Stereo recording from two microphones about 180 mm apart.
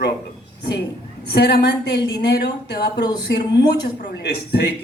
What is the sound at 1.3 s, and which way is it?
A woman's voice, 65° left (ahead or behind).